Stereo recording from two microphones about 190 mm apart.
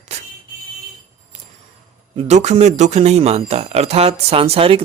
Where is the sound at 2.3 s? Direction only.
35° right (ahead or behind).